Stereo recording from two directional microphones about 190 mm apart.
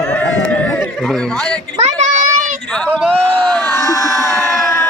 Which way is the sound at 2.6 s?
5° left (ahead or behind).